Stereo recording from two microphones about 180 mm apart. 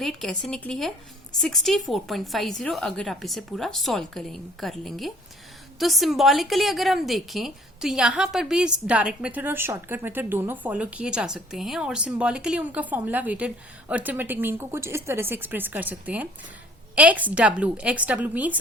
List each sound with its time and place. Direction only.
0.0 s a woman's voice: centre (ahead or behind)